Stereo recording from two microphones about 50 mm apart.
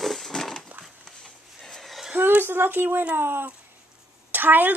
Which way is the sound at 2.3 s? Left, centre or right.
Right.